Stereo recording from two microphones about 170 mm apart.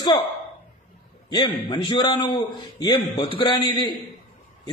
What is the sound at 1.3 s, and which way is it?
A man's voice, 25° left (ahead or behind).